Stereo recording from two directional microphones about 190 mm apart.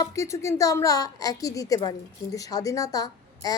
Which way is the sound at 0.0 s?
15° left (ahead or behind).